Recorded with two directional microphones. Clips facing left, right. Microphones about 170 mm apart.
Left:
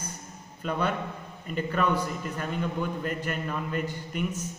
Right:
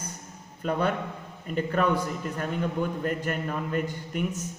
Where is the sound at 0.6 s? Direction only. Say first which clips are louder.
Right 2 dB; 45° right (ahead or behind).